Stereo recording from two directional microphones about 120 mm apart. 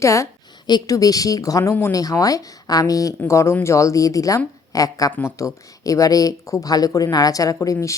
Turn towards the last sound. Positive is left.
turn(degrees=30)  # may be behind; listen again after turning